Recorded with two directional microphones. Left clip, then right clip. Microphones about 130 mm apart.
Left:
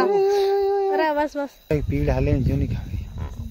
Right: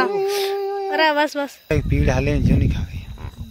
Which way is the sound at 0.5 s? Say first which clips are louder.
Left 3 dB; 20° right (ahead or behind).